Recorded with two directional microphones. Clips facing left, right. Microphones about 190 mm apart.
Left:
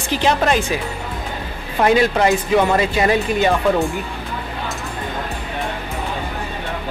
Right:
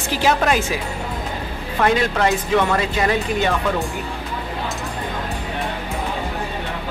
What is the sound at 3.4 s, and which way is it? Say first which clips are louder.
Speech: left 4 dB; centre (ahead or behind).